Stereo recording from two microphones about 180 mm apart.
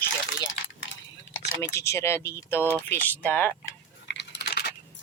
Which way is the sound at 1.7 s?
15° left (ahead or behind).